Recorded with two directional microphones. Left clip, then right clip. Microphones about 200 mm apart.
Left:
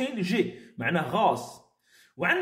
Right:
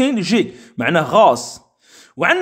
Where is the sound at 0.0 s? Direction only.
45° right (ahead or behind).